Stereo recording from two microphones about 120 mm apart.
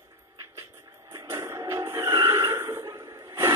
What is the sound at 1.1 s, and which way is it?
Music, 25° right (ahead or behind).